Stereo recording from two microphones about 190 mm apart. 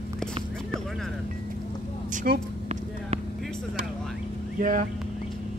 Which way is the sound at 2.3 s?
45° right (ahead or behind).